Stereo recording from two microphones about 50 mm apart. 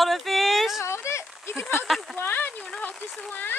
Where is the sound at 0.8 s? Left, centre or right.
Left.